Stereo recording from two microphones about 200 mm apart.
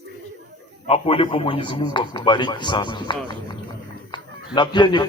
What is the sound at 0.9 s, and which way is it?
A man's voice, 30° left (ahead or behind).